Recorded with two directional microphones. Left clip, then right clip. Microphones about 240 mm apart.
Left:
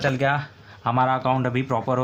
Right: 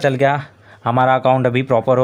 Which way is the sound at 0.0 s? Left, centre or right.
Right.